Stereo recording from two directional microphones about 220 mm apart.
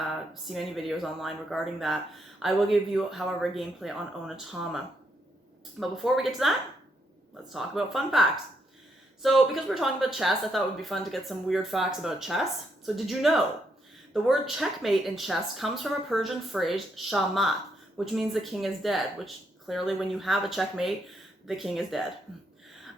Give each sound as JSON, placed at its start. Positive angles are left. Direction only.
{"t": 0.5, "sound": "speech", "side_deg": 0}
{"t": 5.8, "sound": "speech", "side_deg": 0}
{"t": 7.5, "sound": "speech", "side_deg": 0}